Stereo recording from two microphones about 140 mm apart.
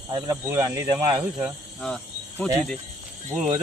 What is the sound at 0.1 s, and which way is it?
Speech, 25° right (ahead or behind).